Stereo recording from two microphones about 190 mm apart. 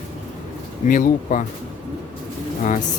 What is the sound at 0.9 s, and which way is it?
Speech, 40° left (ahead or behind).